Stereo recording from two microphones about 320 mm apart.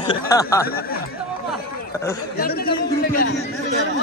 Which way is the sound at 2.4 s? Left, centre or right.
Left.